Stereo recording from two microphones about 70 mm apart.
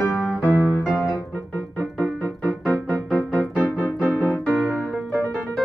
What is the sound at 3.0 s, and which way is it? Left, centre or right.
Music, centre.